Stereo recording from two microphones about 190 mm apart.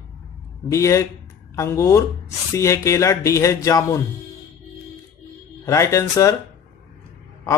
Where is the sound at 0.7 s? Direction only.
15° left (ahead or behind).